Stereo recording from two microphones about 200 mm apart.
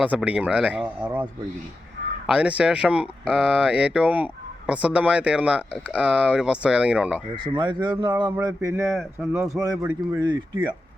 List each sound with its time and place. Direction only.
0.0 s speech: 5° right (ahead or behind)
7.3 s speech: 20° right (ahead or behind)
8.9 s speech: centre (ahead or behind)
9.3 s speech: 15° right (ahead or behind)